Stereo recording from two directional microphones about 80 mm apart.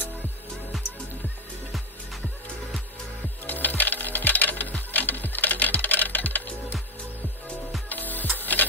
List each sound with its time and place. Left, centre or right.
3.4 s coin: left
7.9 s music: left